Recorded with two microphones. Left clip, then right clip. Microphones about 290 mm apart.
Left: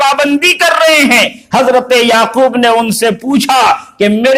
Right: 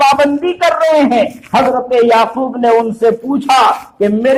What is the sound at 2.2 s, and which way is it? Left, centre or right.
Speech, left.